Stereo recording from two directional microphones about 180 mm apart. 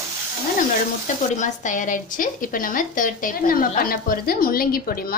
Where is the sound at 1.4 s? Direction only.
45° left (ahead or behind).